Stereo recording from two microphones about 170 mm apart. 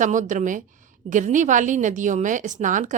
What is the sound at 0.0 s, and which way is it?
A woman's voice, 45° right (ahead or behind).